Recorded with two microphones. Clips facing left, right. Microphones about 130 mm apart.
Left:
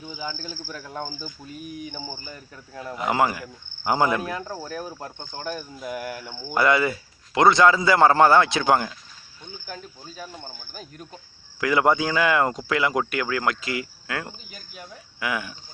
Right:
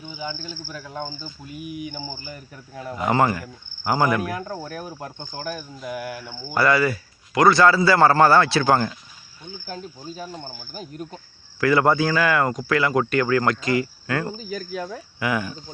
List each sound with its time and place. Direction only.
0.7 s cricket: 5° right (ahead or behind)
1.5 s speech: 10° right (ahead or behind)
2.9 s a man's voice: 5° left (ahead or behind)
3.8 s cricket: 20° left (ahead or behind)
4.6 s speech: 15° right (ahead or behind)
5.7 s cricket: centre (ahead or behind)
6.5 s a man's voice: 20° left (ahead or behind)
10.0 s speech: 10° right (ahead or behind)
10.8 s cricket: 5° right (ahead or behind)
11.6 s a man's voice: 15° left (ahead or behind)
13.1 s cricket: 5° left (ahead or behind)